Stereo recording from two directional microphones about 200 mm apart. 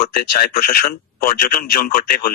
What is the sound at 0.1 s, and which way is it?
Speech, 50° left (ahead or behind).